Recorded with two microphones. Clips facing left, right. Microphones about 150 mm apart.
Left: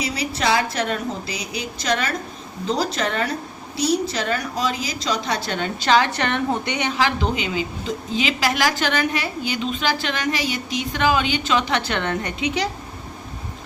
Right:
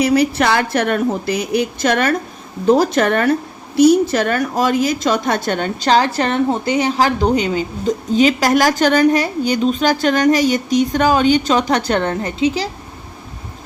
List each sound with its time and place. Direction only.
0.0 s a woman's voice: 60° right (ahead or behind); by 12.6 s 30° right (ahead or behind)